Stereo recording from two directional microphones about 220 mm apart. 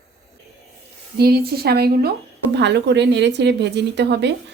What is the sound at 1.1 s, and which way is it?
A woman's voice, 45° right (ahead or behind).